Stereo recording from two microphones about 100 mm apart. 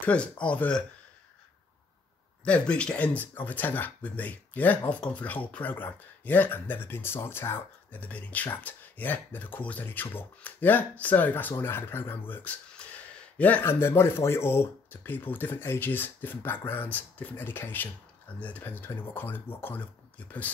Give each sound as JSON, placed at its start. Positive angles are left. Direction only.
{"t": 0.0, "sound": "speech", "side_deg": 10}
{"t": 2.4, "sound": "speech", "side_deg": 10}